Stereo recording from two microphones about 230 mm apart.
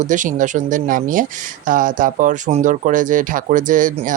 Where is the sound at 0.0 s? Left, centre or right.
Right.